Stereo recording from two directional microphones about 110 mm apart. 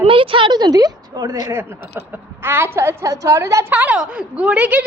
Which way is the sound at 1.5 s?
20° right (ahead or behind).